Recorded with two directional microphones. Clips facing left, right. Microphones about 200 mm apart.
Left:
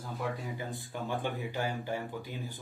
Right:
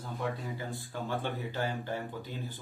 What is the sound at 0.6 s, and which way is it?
Speech, 15° left (ahead or behind).